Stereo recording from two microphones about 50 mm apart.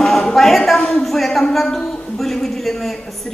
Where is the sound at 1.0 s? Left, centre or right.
Centre.